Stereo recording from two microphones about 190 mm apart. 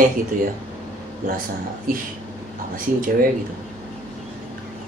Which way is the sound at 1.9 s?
50° right (ahead or behind).